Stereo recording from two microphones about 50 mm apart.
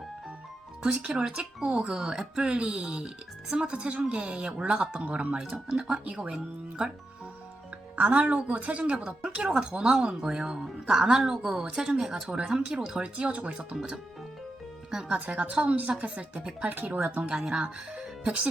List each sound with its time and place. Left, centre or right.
0.8 s speech: right
7.9 s speech: right; by 13.0 s centre
13.0 s speech: right
15.1 s speech: right
17.2 s speech: centre